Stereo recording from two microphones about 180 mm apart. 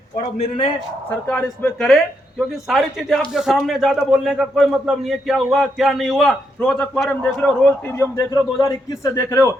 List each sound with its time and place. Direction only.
0.2 s a man's voice: 35° left (ahead or behind)
1.3 s a man's voice: 5° left (ahead or behind)